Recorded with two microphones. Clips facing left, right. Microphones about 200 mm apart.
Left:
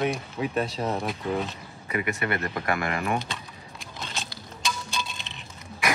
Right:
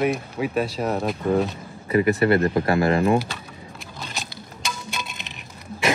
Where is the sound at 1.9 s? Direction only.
30° right (ahead or behind).